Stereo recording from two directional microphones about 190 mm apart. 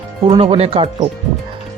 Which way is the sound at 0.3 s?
30° right (ahead or behind).